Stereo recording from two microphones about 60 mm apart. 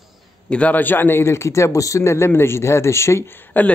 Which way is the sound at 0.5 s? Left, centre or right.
Left.